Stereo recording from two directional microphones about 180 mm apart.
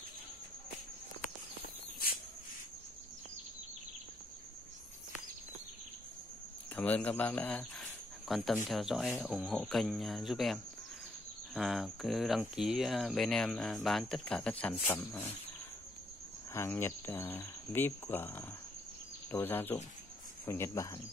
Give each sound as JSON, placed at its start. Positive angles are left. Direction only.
{"t": 1.6, "sound": "walk", "side_deg": 55}
{"t": 6.7, "sound": "speech", "side_deg": 10}
{"t": 16.5, "sound": "speech", "side_deg": 10}